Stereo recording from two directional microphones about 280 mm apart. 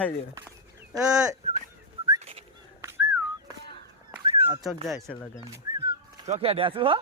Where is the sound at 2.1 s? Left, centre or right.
Centre.